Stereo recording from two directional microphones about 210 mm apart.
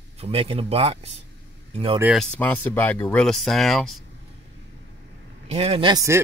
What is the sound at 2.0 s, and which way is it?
A man's voice, centre (ahead or behind).